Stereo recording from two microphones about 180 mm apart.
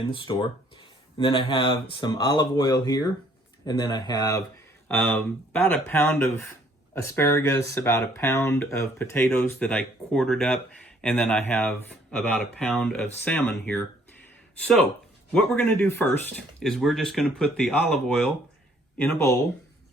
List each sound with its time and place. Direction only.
0.1 s speech: 25° left (ahead or behind)
4.9 s speech: 10° left (ahead or behind)